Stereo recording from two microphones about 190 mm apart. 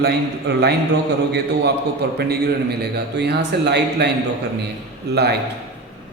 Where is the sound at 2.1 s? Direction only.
60° right (ahead or behind).